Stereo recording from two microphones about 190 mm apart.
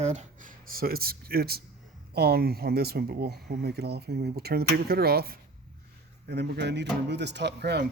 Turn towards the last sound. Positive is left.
turn(degrees=-60)  # may be behind; listen again after turning